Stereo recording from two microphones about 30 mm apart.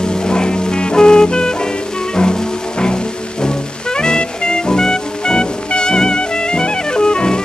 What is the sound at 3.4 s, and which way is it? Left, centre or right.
Music, left.